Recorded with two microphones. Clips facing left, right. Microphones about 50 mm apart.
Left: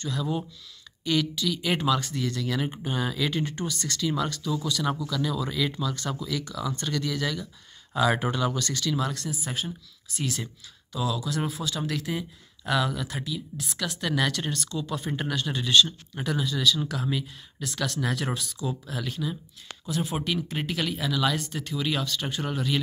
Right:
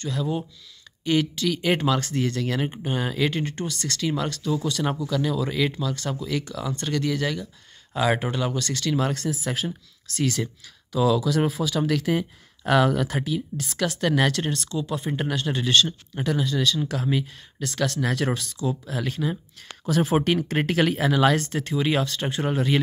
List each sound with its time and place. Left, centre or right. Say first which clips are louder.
0.2 s speech: right 3 dB; centre
1.0 s speech: right 3 dB; right
1.6 s speech: right 2 dB; right
2.1 s speech: right 4 dB; right
2.8 s speech: right 3 dB; right
4.6 s speech: even; right
5.1 s speech: right 4 dB; right
8.5 s speech: right 3 dB; right
9.1 s speech: right 5 dB; right
11.0 s speech: right 8 dB; right
14.0 s speech: right 4 dB; right
18.9 s speech: right 5 dB; right
19.9 s speech: right 8 dB; right
20.2 s speech: right 7 dB; right